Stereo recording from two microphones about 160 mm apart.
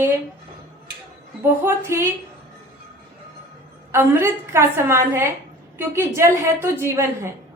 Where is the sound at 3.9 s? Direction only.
15° right (ahead or behind).